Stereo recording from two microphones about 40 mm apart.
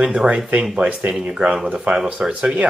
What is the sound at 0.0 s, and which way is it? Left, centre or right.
Speech, right.